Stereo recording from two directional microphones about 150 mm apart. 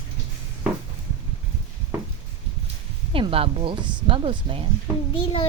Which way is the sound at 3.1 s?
35° right (ahead or behind).